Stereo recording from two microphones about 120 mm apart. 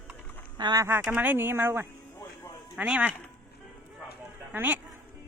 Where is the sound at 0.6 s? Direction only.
35° right (ahead or behind).